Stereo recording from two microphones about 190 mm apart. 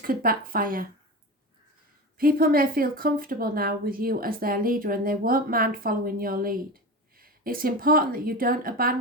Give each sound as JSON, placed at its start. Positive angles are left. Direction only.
{"t": 0.0, "sound": "speech", "side_deg": -50}
{"t": 2.1, "sound": "speech", "side_deg": -50}